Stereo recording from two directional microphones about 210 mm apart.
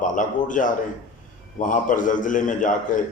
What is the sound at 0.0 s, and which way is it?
A man's voice, 40° left (ahead or behind).